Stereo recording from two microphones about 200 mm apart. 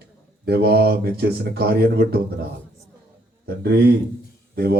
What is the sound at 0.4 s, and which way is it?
Speech, 55° right (ahead or behind).